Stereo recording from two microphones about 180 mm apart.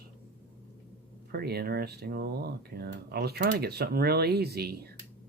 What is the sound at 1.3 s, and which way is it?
Speech, 60° right (ahead or behind).